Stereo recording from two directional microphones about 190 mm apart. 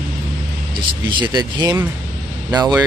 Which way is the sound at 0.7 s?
20° right (ahead or behind).